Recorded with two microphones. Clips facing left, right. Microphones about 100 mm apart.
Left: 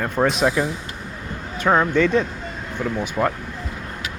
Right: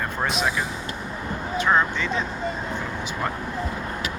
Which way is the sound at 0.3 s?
55° left (ahead or behind).